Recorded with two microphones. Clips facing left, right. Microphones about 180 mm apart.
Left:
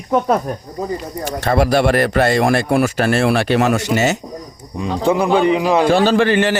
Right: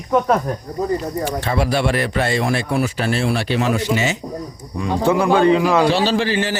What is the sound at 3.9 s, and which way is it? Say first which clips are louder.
Speech: left 4 dB; 45° left (ahead or behind).